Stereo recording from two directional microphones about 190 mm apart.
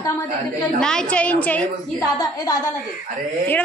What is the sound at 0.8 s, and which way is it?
A woman's voice, 5° left (ahead or behind).